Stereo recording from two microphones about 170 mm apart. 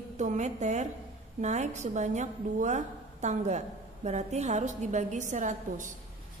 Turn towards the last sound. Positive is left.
turn(degrees=-45)  # may be behind; listen again after turning